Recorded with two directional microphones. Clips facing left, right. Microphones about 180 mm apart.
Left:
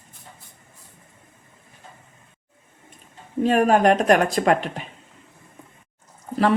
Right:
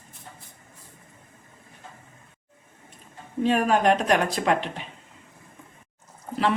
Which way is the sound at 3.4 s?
45° left (ahead or behind).